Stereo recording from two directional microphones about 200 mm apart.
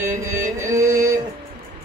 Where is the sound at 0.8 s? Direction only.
15° right (ahead or behind).